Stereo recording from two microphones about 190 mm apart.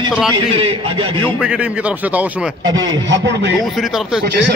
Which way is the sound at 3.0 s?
70° right (ahead or behind).